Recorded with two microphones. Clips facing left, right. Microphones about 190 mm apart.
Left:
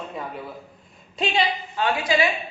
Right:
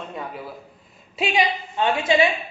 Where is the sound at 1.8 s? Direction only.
25° right (ahead or behind).